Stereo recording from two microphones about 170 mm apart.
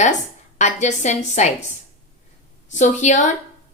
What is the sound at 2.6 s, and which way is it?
Speech, 45° left (ahead or behind).